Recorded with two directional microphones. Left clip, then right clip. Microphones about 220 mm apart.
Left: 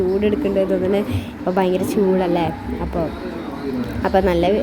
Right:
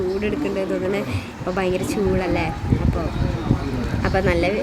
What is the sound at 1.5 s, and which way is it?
Speech, 10° left (ahead or behind).